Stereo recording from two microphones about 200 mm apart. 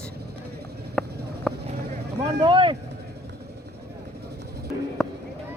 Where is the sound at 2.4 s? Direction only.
25° right (ahead or behind).